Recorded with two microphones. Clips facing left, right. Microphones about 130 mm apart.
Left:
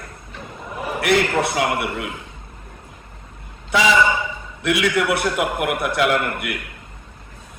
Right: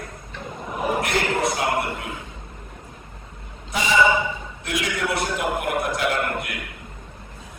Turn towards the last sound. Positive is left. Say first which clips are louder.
# left 3 dB
turn(degrees=60)  # may be behind; listen again after turning